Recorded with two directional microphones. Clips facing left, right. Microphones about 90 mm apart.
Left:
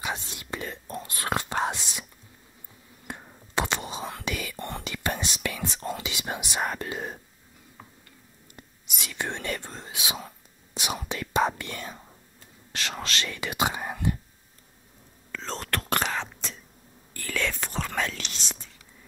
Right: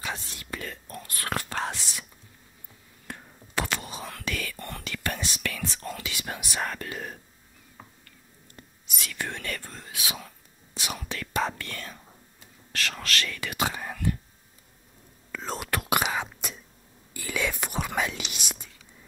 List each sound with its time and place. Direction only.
0.0 s whispering: 20° left (ahead or behind)
3.1 s whispering: 20° left (ahead or behind)
8.5 s whispering: 20° left (ahead or behind)
15.3 s whispering: 10° right (ahead or behind)